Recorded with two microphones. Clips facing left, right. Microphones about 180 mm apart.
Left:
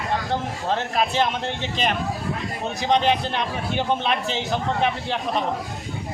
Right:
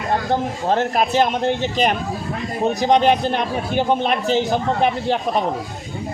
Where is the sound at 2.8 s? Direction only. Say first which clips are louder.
Right 4 dB; 45° right (ahead or behind).